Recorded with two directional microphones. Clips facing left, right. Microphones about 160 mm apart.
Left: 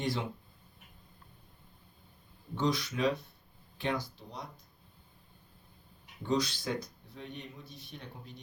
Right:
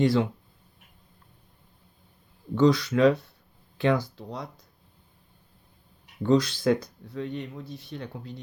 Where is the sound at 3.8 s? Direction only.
85° right.